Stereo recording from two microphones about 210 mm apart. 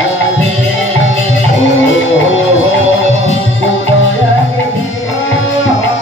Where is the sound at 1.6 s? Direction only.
65° left (ahead or behind).